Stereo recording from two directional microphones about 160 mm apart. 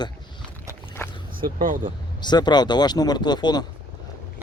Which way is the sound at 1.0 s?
15° left (ahead or behind).